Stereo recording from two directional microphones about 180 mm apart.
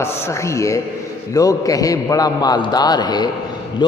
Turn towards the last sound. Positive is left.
turn(degrees=20)  # may be behind; listen again after turning